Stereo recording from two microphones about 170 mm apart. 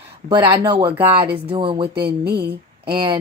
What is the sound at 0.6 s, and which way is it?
Speech, 25° right (ahead or behind).